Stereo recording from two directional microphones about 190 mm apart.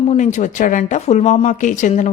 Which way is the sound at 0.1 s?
40° left (ahead or behind).